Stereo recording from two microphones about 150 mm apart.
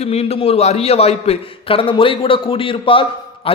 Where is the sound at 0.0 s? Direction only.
45° left (ahead or behind).